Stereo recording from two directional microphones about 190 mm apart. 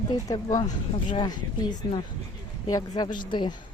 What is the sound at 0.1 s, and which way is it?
Speech, 20° left (ahead or behind).